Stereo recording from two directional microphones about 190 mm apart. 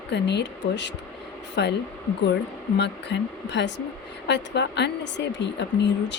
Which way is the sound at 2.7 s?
65° left (ahead or behind).